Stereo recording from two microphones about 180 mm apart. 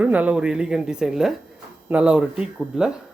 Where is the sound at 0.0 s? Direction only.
10° right (ahead or behind).